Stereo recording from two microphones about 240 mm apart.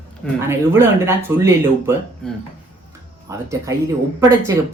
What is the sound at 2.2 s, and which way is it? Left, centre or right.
Speech, centre.